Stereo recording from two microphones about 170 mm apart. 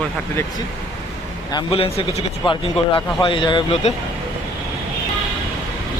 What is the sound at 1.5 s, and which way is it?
Speech, 35° left (ahead or behind).